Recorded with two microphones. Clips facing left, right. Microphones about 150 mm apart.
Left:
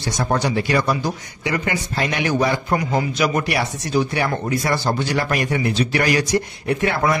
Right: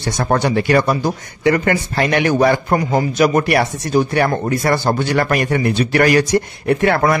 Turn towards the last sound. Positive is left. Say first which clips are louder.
# right 5 dB
turn(degrees=-55)  # may be behind; listen again after turning